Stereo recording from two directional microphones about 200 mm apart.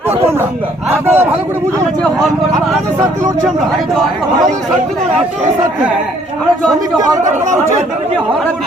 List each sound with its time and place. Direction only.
0.1 s speech: 10° right (ahead or behind)
7.3 s speech: 35° right (ahead or behind)